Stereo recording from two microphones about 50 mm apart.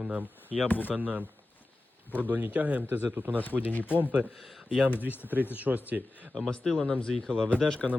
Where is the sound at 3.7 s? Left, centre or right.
Left.